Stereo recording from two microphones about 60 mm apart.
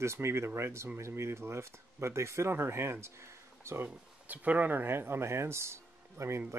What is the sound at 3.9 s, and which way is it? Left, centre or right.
Speech, right.